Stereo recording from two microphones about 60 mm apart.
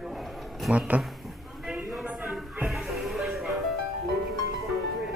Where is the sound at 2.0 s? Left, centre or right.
Right.